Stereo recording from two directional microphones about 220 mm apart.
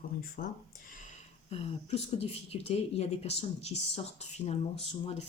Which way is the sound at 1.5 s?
25° left (ahead or behind).